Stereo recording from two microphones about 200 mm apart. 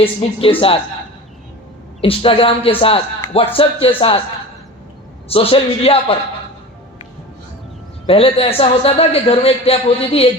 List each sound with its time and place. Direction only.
0.0 s a man's voice: 30° left (ahead or behind)
2.0 s a man's voice: 30° left (ahead or behind)
5.3 s a man's voice: 30° left (ahead or behind)
8.0 s a man's voice: 30° left (ahead or behind)